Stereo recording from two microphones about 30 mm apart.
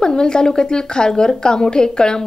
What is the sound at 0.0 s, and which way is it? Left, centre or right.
A woman's voice, left.